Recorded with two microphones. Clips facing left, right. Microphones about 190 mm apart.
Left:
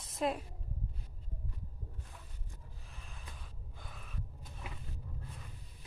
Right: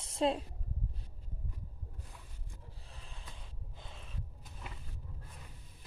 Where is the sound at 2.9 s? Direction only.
30° right (ahead or behind).